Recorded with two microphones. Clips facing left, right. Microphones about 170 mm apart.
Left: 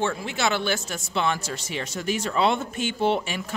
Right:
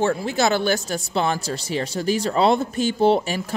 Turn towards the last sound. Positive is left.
turn(degrees=-35)  # may be behind; listen again after turning